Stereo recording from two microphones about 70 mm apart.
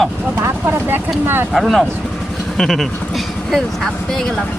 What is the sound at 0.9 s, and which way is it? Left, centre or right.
Speech, right.